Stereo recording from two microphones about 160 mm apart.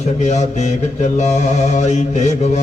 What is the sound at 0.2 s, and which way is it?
A man's voice, 50° left (ahead or behind).